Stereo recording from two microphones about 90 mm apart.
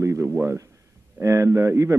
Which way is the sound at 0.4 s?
35° right (ahead or behind).